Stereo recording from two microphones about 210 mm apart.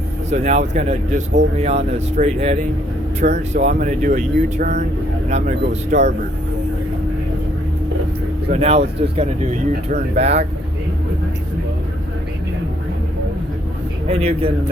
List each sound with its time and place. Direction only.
0.3 s speech: 35° right (ahead or behind)
8.4 s speech: 30° right (ahead or behind)
14.1 s speech: 30° right (ahead or behind)